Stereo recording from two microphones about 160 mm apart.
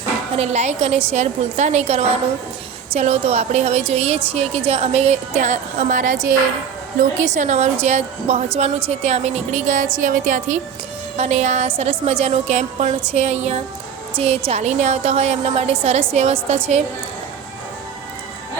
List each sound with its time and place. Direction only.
0.3 s a woman's voice: 45° right (ahead or behind)